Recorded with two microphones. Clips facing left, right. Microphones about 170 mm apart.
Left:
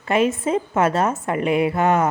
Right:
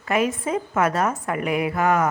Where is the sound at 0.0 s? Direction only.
25° left (ahead or behind).